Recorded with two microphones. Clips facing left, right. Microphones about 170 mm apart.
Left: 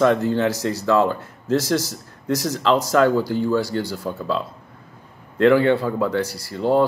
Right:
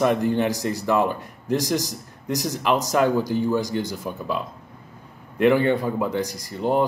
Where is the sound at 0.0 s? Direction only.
15° right (ahead or behind).